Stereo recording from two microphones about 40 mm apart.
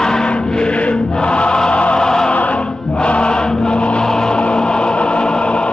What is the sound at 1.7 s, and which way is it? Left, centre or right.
Music, left.